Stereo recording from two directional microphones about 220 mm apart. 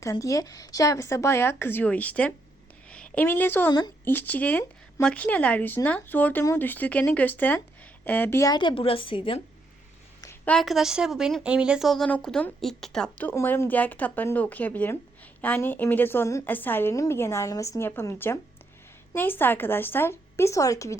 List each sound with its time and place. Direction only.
0.0 s a woman's voice: 15° left (ahead or behind)
10.2 s a woman's voice: 10° left (ahead or behind)